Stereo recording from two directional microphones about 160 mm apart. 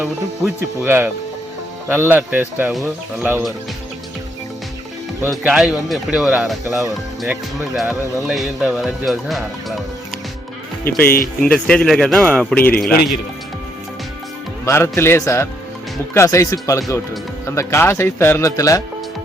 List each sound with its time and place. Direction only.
0.0 s speech: 5° right (ahead or behind)
0.9 s a man's voice: 15° right (ahead or behind)
5.3 s speech: 5° right (ahead or behind)
10.8 s speech: 70° left (ahead or behind)
11.4 s speech: 5° left (ahead or behind)
14.6 s speech: 15° left (ahead or behind)